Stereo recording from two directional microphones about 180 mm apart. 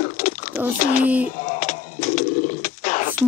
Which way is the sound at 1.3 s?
45° left (ahead or behind).